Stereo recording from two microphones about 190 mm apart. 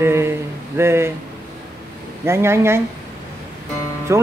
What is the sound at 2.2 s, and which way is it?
Speech, 15° right (ahead or behind).